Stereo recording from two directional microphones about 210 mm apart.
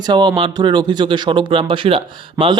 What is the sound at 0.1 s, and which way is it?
Speech, 20° right (ahead or behind).